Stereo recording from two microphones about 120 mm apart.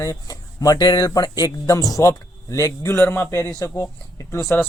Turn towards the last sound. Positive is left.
turn(degrees=25)  # may be behind; listen again after turning